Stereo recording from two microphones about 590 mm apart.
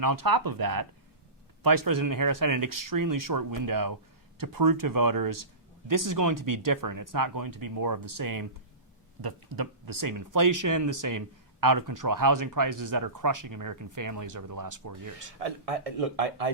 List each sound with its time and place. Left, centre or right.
0.0 s speech: right
15.4 s speech: right